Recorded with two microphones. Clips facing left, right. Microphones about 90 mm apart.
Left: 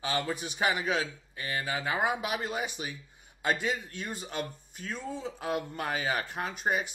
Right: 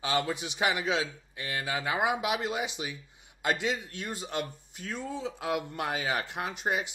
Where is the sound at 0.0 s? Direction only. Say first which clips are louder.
Right 2 dB; 15° right (ahead or behind).